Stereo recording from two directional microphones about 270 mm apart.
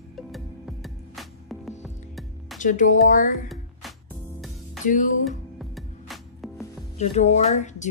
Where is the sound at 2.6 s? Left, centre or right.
Left.